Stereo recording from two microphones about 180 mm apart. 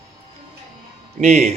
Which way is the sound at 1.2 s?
40° right (ahead or behind).